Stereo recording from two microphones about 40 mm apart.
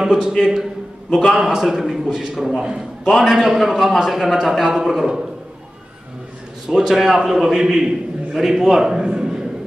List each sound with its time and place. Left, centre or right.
0.0 s a man's voice: centre
6.7 s a man's voice: centre